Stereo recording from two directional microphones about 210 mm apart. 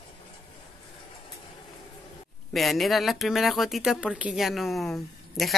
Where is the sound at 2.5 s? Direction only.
Centre (ahead or behind).